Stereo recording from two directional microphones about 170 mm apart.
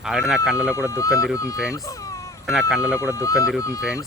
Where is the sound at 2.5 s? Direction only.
5° right (ahead or behind).